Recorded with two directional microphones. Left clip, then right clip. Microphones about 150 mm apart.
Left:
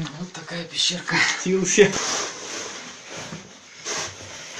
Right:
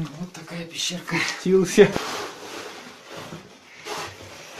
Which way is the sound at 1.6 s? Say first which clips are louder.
Right 1 dB; 35° right (ahead or behind).